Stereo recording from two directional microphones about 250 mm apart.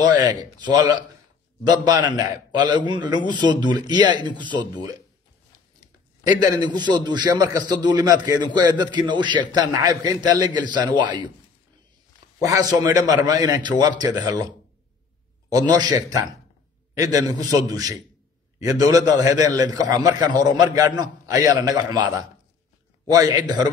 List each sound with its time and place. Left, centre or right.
0.1 s a man's voice: centre
5.8 s a sound: centre
6.5 s a man's voice: centre
12.4 s a man's voice: centre
15.5 s a man's voice: centre